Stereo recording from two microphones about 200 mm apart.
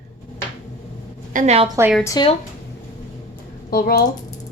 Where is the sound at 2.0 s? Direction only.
20° left (ahead or behind).